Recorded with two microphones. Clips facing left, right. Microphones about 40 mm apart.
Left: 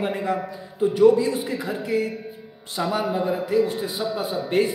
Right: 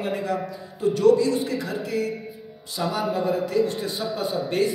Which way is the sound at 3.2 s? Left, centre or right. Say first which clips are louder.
Even; centre.